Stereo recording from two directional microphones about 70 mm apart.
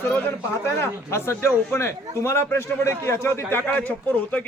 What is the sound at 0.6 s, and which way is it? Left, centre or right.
A man's voice, left.